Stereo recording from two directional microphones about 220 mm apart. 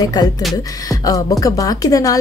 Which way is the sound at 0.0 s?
20° left (ahead or behind).